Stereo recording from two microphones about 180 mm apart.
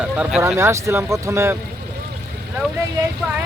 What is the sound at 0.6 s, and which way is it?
Speech, 15° right (ahead or behind).